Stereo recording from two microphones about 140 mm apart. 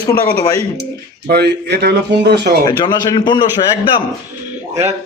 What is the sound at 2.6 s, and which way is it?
Speech, 30° left (ahead or behind).